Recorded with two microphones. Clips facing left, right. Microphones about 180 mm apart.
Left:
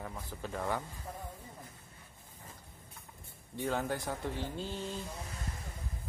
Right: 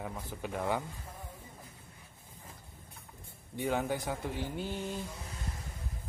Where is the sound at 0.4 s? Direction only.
10° right (ahead or behind).